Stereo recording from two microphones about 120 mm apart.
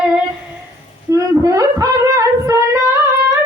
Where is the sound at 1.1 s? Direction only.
25° right (ahead or behind).